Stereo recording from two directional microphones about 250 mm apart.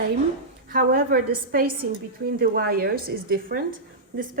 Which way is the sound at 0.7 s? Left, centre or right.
Right.